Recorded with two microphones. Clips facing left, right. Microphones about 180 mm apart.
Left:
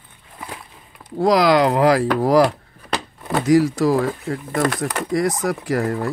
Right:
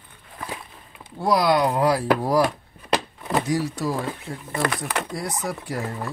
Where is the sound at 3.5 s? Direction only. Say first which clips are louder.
Left 9 dB; 90° left.